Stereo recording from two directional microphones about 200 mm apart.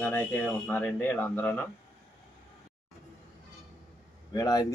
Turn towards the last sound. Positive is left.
turn(degrees=20)  # may be behind; listen again after turning